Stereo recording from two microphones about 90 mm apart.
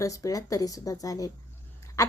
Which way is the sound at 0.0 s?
40° left (ahead or behind).